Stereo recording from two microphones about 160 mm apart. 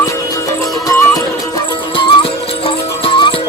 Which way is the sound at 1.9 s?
35° left (ahead or behind).